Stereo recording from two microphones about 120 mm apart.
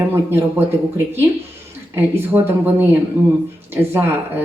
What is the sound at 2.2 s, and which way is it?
Speech, 20° right (ahead or behind).